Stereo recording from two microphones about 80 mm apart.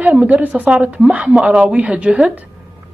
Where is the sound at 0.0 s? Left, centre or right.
Centre.